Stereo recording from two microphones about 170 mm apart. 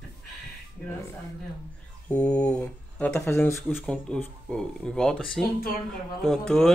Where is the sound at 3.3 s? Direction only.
15° left (ahead or behind).